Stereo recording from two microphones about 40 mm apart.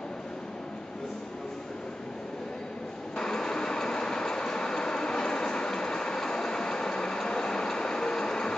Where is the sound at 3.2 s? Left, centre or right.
Centre.